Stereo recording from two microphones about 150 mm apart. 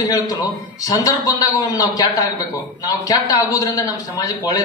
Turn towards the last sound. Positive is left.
turn(degrees=25)  # may be behind; listen again after turning